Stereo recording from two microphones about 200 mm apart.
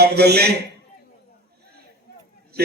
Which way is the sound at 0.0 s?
55° right (ahead or behind).